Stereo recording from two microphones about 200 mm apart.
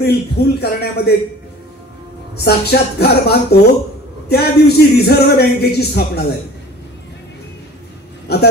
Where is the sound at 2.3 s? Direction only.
55° left (ahead or behind).